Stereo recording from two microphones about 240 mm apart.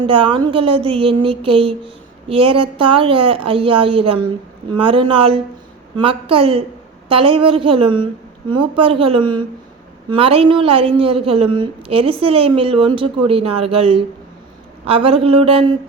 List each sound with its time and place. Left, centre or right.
0.0 s a woman's voice: right